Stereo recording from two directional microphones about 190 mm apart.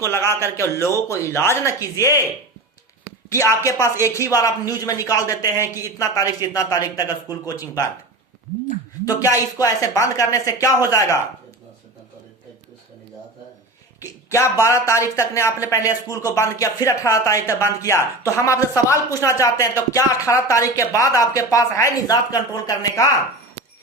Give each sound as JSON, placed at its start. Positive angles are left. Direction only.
{"t": 0.1, "sound": "speech", "side_deg": 15}
{"t": 3.2, "sound": "speech", "side_deg": 15}
{"t": 9.0, "sound": "speech", "side_deg": 15}
{"t": 14.0, "sound": "a sound", "side_deg": 15}
{"t": 14.6, "sound": "speech", "side_deg": 15}